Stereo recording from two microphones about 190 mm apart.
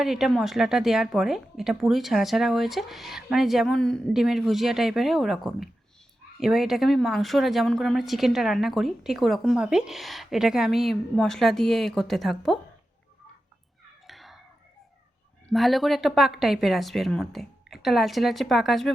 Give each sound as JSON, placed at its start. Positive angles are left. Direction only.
{"t": 0.0, "sound": "speech", "side_deg": 0}
{"t": 14.1, "sound": "whispering", "side_deg": 0}
{"t": 15.4, "sound": "speech", "side_deg": 0}